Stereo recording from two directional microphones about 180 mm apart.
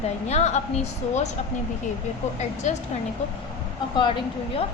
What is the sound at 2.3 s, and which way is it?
Speech, 40° left (ahead or behind).